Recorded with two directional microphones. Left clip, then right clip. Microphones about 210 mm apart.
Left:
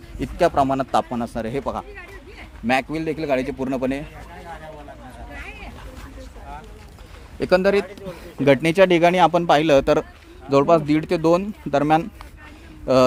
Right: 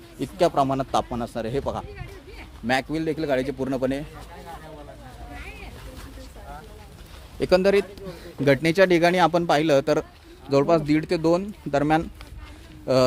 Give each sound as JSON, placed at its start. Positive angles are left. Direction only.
{"t": 0.2, "sound": "a man's voice", "side_deg": 5}
{"t": 7.3, "sound": "speech", "side_deg": 5}